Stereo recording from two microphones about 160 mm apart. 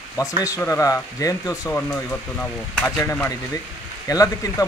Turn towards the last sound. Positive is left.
turn(degrees=20)  # may be behind; listen again after turning